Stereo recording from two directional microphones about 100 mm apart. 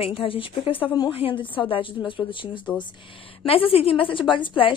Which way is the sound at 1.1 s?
60° left (ahead or behind).